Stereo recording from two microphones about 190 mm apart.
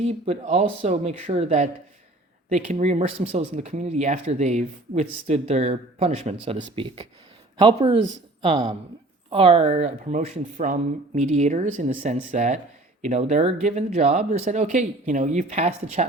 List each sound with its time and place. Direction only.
0.0 s speech: 35° right (ahead or behind)